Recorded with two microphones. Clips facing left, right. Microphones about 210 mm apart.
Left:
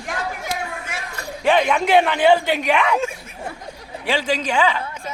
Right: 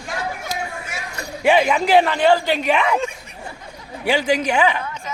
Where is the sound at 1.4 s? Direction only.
10° right (ahead or behind).